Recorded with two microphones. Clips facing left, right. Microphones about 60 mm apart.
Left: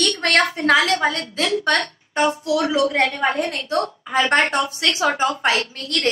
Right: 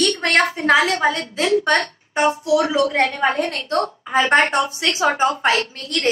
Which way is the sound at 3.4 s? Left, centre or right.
Centre.